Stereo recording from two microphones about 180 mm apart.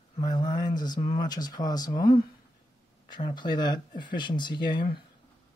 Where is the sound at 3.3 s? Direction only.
25° left (ahead or behind).